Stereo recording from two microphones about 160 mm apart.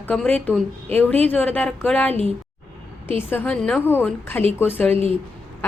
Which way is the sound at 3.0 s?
15° left (ahead or behind).